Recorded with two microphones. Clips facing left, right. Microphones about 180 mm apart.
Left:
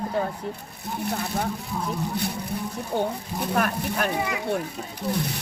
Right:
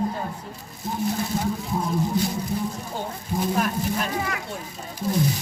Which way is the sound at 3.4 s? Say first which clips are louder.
Even; 65° left (ahead or behind).